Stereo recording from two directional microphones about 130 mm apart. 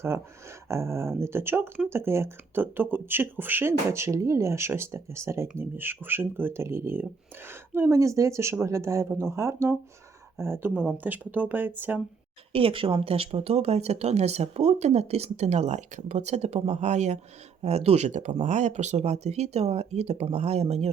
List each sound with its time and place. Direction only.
0.7 s speech: 20° right (ahead or behind)
12.5 s speech: 45° right (ahead or behind)